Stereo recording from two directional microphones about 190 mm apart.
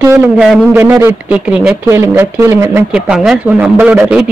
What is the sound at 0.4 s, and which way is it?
A man's voice, 10° right (ahead or behind).